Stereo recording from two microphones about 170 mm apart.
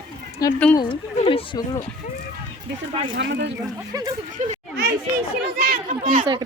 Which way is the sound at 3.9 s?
20° right (ahead or behind).